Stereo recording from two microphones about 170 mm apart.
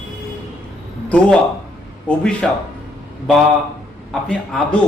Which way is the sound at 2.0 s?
5° left (ahead or behind).